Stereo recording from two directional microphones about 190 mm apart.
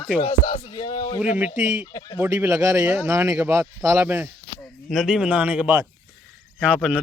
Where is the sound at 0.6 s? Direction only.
25° left (ahead or behind).